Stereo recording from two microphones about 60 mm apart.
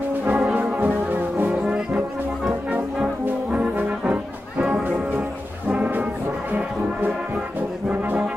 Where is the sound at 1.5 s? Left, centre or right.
Centre.